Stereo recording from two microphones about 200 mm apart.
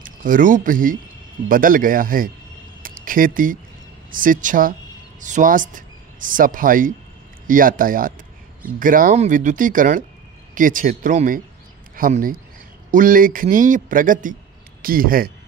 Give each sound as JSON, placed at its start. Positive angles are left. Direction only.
{"t": 0.0, "sound": "a man's voice", "side_deg": -40}